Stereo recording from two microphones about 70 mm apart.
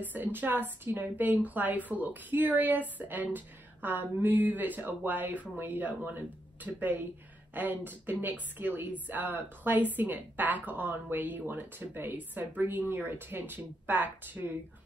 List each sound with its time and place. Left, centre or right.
0.0 s a woman's voice: right